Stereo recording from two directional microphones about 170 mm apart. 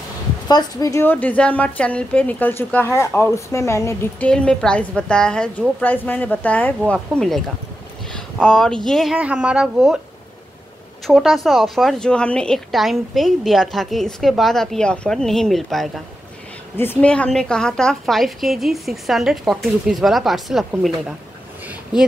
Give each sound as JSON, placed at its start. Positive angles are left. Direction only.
{"t": 0.5, "sound": "a woman's voice", "side_deg": 20}
{"t": 4.3, "sound": "a woman's voice", "side_deg": 5}
{"t": 11.1, "sound": "a woman's voice", "side_deg": 0}
{"t": 16.7, "sound": "a woman's voice", "side_deg": 15}